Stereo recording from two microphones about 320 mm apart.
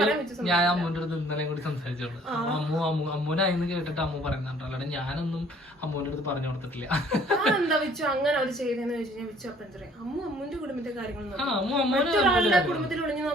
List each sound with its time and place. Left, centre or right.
0.0 s a man's voice: centre
6.8 s a man's voice: centre
11.3 s a man's voice: centre